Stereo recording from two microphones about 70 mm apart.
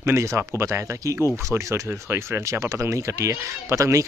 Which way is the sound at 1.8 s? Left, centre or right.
Right.